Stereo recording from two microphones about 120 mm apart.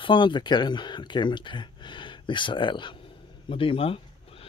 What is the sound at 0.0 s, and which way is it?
Speech, 40° left (ahead or behind).